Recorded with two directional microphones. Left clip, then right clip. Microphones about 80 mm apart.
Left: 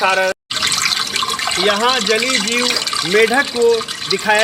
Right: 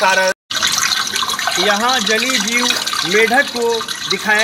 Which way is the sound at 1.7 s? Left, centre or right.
Left.